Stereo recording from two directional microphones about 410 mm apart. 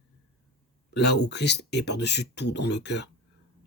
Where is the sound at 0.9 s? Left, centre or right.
Left.